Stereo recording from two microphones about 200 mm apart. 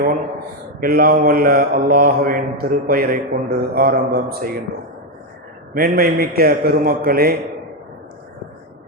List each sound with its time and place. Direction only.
0.8 s mantra: 45° right (ahead or behind)
5.7 s mantra: 45° right (ahead or behind)